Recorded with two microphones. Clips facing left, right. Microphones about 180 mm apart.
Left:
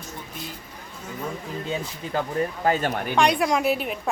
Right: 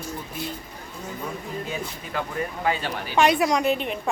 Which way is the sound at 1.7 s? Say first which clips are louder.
Left 7 dB; 35° left (ahead or behind).